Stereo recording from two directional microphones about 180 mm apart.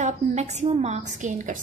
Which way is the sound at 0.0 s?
40° right (ahead or behind).